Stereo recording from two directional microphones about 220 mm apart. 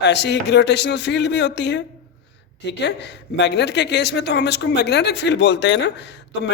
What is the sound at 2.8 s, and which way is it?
Speech, 50° left (ahead or behind).